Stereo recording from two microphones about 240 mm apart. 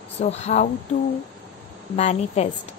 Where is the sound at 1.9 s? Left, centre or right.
Left.